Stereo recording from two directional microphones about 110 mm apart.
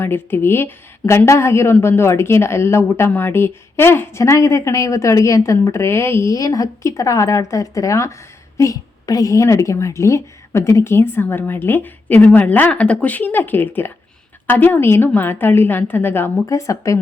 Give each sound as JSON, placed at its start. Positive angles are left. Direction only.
{"t": 0.0, "sound": "a woman's voice", "side_deg": 20}